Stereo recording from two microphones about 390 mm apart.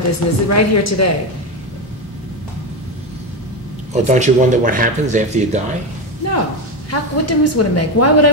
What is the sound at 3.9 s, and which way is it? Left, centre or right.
Speech, centre.